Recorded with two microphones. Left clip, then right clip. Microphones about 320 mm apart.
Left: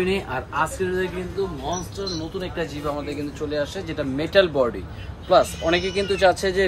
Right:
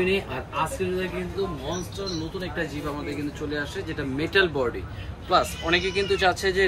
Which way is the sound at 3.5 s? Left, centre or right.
Left.